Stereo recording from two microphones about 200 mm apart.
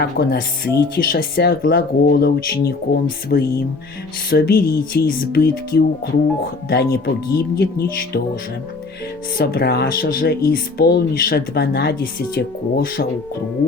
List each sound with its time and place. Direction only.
0.0 s speech: 50° left (ahead or behind)
9.4 s speech: 50° left (ahead or behind)